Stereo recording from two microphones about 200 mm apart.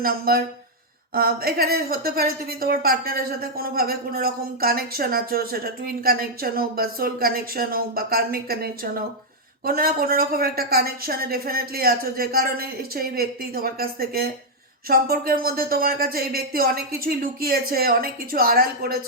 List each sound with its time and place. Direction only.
0.0 s a woman's voice: 50° right (ahead or behind)